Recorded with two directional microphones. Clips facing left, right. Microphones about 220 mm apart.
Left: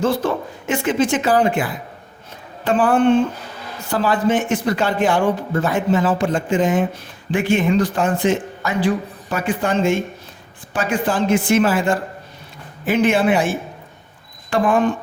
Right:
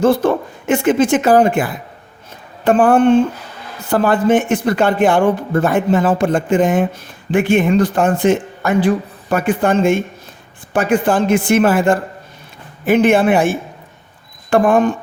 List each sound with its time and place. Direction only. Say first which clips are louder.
0.0 s speech: right 6 dB; 50° right (ahead or behind)
14.5 s speech: right 4 dB; 45° right (ahead or behind)